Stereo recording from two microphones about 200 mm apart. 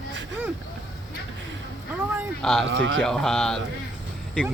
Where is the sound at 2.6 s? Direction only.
75° right (ahead or behind).